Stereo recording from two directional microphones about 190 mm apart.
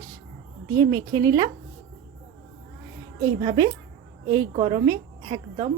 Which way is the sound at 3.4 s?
20° right (ahead or behind).